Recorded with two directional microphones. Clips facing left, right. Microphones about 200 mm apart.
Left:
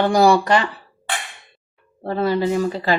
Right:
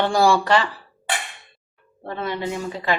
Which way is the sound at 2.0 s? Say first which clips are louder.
Left 7 dB; 35° left (ahead or behind).